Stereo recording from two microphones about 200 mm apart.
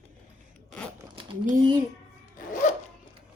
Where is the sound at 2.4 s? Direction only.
40° left (ahead or behind).